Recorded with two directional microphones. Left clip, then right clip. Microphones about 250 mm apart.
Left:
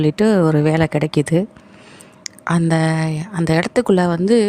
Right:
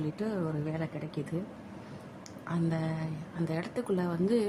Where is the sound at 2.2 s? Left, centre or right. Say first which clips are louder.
Left 15 dB; left.